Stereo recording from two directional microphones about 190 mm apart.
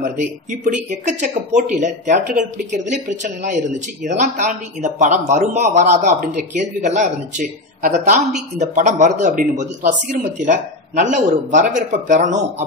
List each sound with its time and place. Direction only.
0.0 s speech: 40° right (ahead or behind)